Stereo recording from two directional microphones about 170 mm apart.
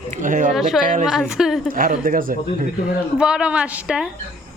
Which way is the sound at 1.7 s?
55° right (ahead or behind).